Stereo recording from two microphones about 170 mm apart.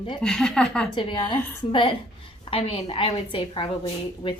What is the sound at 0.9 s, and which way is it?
A woman's voice, 25° left (ahead or behind).